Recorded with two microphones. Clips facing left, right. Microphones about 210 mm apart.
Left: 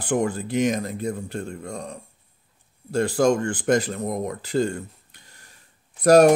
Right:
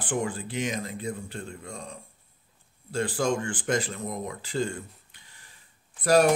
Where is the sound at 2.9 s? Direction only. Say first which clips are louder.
Left 7 dB; 40° left (ahead or behind).